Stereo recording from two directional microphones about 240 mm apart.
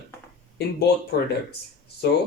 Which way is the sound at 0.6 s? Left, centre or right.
Left.